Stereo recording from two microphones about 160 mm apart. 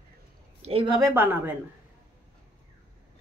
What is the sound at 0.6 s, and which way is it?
Speech, 35° right (ahead or behind).